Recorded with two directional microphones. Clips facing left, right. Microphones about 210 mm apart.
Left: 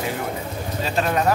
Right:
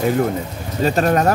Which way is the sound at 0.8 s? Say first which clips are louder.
Right 7 dB; 45° right (ahead or behind).